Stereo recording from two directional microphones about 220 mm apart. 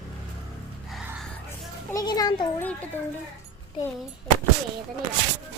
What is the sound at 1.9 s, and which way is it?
Speech, 15° left (ahead or behind).